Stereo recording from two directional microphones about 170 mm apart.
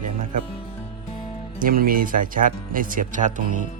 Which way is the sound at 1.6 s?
55° right (ahead or behind).